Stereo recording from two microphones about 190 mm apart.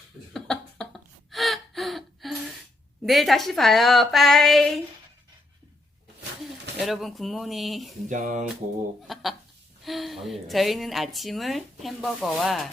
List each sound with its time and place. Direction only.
0.3 s cough: 5° left (ahead or behind)
1.3 s gasp: centre (ahead or behind)
3.0 s a woman's voice: centre (ahead or behind)
6.7 s a woman's voice: centre (ahead or behind)
8.1 s music: 40° right (ahead or behind)
9.1 s a sound: centre (ahead or behind)
9.8 s a woman's voice: centre (ahead or behind)